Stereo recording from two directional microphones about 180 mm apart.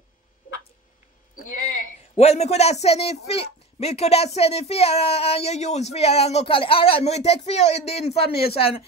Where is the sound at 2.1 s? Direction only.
35° left (ahead or behind).